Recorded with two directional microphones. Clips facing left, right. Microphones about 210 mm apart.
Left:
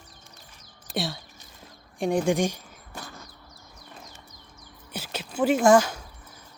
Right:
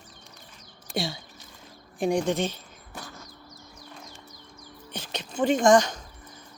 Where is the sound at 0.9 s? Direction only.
Centre (ahead or behind).